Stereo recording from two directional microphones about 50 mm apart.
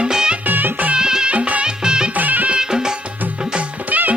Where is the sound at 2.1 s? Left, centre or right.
Right.